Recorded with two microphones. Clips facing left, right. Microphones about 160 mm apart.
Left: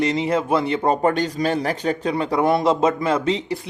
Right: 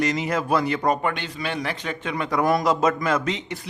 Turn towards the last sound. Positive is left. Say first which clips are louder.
# left 4 dB
turn(degrees=30)  # may be behind; listen again after turning